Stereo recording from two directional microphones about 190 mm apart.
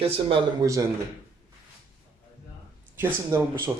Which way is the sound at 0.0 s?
30° right (ahead or behind).